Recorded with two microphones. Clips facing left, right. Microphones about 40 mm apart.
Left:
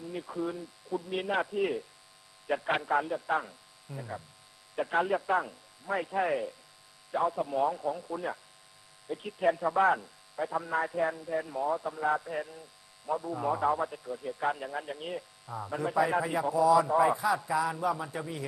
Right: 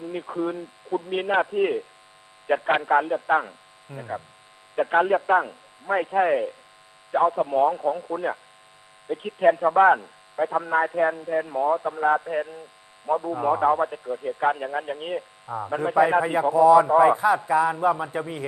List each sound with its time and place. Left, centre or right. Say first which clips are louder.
0.0 s a man's voice: right 7 dB; right